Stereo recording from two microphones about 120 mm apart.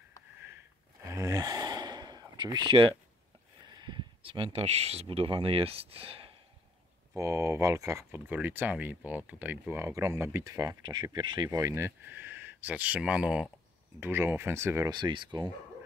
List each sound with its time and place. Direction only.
1.1 s gasp: 30° right (ahead or behind)
3.8 s speech: 45° right (ahead or behind)
7.2 s speech: 25° right (ahead or behind); by 13.5 s 5° right (ahead or behind)
13.9 s speech: 20° right (ahead or behind)
14.9 s speech: 40° right (ahead or behind)